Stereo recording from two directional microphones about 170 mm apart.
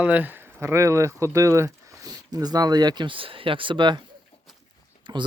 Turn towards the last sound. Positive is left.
turn(degrees=-25)  # may be behind; listen again after turning